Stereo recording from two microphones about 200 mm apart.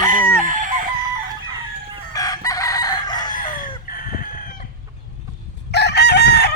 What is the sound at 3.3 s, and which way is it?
Chicken, 40° left (ahead or behind).